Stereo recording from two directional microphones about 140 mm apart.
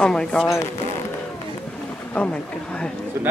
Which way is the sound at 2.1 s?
10° left (ahead or behind).